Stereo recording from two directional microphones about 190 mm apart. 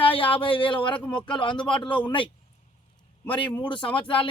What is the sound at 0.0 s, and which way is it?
Speech, 30° left (ahead or behind).